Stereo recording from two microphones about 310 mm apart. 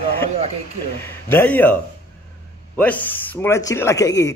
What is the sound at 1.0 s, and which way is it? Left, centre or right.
A man's voice, centre.